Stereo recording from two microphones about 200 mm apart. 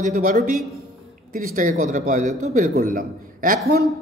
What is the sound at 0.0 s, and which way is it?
A man's voice, 40° right (ahead or behind).